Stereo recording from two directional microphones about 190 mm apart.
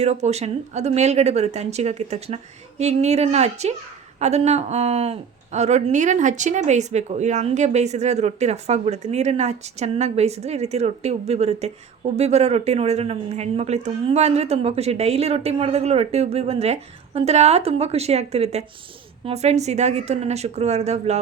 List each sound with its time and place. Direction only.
0.0 s speech: 35° right (ahead or behind)